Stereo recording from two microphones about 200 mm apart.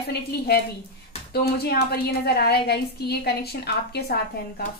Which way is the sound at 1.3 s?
50° left (ahead or behind).